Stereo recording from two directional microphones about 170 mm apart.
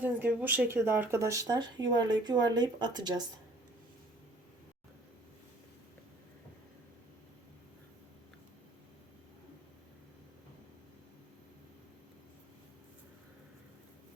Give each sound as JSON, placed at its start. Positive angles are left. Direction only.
{"t": 0.0, "sound": "speech", "side_deg": -10}